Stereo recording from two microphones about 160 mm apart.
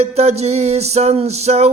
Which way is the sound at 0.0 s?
40° right (ahead or behind).